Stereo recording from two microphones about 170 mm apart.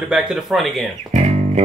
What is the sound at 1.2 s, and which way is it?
Music, 40° right (ahead or behind).